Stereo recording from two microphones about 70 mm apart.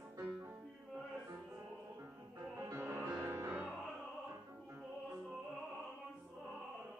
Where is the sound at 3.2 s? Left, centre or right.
Right.